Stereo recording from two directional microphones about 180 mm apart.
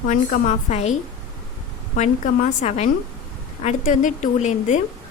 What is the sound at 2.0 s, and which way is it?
A woman's voice, 40° left (ahead or behind).